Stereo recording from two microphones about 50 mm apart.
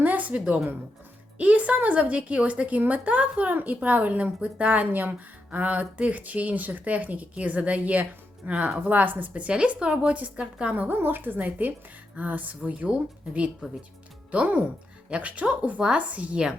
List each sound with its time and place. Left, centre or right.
0.0 s a sound: right
1.4 s speech: right
10.4 s a woman's voice: centre
10.8 s speech: right